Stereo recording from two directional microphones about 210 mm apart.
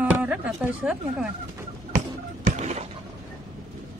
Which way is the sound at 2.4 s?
35° right (ahead or behind).